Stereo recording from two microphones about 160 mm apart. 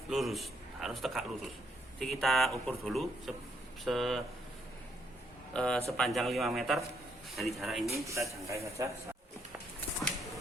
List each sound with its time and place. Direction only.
0.1 s a man's voice: centre (ahead or behind)
5.5 s speech: 5° left (ahead or behind)
7.9 s a man's voice: 20° right (ahead or behind)